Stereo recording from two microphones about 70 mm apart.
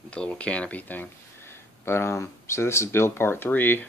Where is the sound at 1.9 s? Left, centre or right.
Left.